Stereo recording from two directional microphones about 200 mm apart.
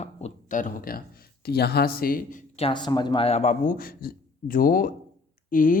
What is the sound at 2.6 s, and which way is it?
A man's voice, 25° left (ahead or behind).